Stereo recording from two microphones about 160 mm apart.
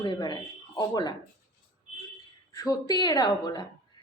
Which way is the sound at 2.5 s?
20° left (ahead or behind).